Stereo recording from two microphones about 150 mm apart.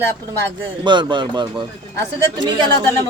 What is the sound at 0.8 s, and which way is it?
Speech, 30° right (ahead or behind).